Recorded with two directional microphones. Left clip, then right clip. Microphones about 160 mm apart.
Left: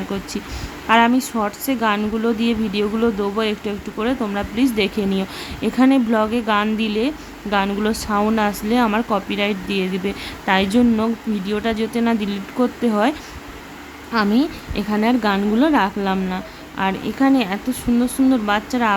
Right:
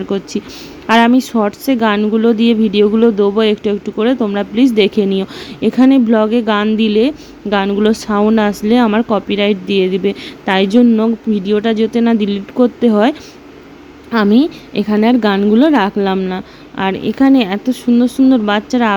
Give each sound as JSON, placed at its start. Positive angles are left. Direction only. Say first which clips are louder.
{"t": 0.1, "sound": "a woman's voice", "louder": "right 7 dB", "side_deg": -25}
{"t": 14.3, "sound": "a woman's voice", "louder": "right 7 dB", "side_deg": -25}